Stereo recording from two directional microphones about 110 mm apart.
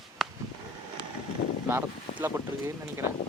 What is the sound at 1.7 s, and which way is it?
Boat, 20° right (ahead or behind).